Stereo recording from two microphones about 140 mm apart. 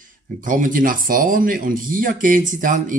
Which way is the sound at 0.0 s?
70° right (ahead or behind).